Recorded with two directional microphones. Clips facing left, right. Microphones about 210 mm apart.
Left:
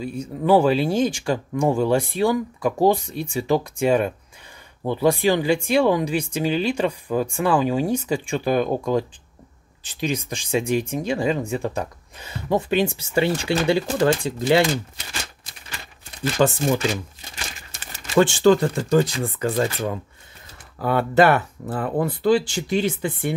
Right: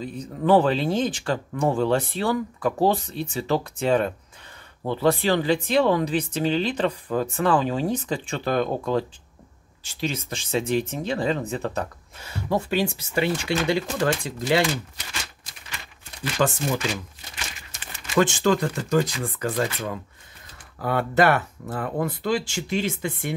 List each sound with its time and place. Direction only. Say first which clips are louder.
0.0 s speech: left 2 dB; 10° left (ahead or behind); by 14.7 s 25° left (ahead or behind)
16.3 s speech: left 4 dB; 25° left (ahead or behind)